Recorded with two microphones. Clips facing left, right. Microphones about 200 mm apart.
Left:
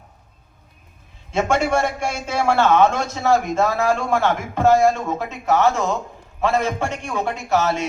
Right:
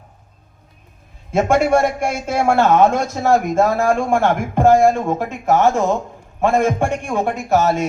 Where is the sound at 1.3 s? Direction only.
50° right (ahead or behind).